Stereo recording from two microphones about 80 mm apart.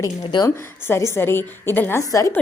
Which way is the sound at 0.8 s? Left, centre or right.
Left.